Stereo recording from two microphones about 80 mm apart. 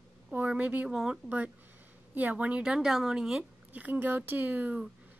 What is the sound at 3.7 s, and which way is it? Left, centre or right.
Speech, right.